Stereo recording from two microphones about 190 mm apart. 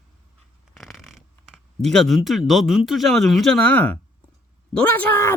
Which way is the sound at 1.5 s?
Centre (ahead or behind).